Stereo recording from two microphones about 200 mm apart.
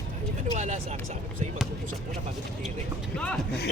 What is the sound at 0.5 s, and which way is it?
Speech, 35° right (ahead or behind).